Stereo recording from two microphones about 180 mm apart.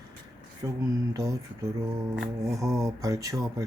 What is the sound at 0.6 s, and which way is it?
Speech, 10° right (ahead or behind).